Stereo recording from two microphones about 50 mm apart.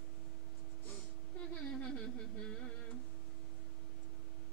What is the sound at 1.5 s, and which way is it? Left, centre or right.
Music, centre.